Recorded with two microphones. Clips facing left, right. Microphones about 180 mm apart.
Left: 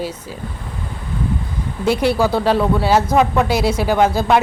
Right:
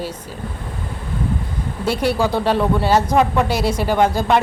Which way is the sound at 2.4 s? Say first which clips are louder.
Left 1 dB; 10° left (ahead or behind).